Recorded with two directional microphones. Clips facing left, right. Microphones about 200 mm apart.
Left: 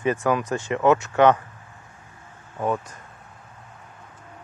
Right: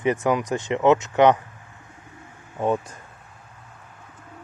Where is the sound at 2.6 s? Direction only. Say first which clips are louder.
Right 2 dB; 25° right (ahead or behind).